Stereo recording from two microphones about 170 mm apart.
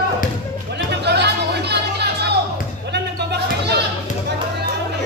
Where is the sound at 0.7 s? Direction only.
80° right.